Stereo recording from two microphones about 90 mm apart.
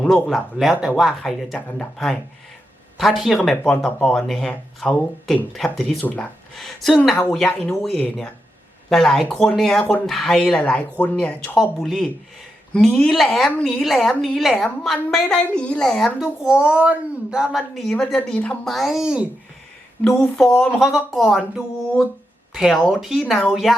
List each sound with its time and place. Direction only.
0.0 s a woman's voice: centre (ahead or behind)
6.0 s speech: 20° left (ahead or behind)
6.6 s a woman's voice: 5° left (ahead or behind)
11.5 s a woman's voice: centre (ahead or behind)
16.2 s a woman's voice: 10° right (ahead or behind)
20.2 s a woman's voice: 5° left (ahead or behind)